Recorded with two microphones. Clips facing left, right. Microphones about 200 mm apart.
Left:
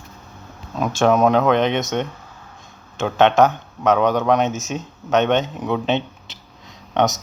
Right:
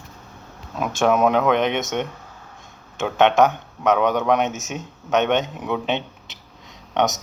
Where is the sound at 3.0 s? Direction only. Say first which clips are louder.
Left 2 dB; 15° right (ahead or behind).